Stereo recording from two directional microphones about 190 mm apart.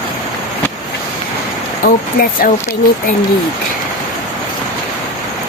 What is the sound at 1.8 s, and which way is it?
Speech, 50° left (ahead or behind).